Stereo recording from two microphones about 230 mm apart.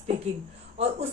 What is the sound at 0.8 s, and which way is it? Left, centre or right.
Speech, right.